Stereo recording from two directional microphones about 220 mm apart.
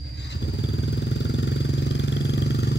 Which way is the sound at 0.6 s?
55° left (ahead or behind).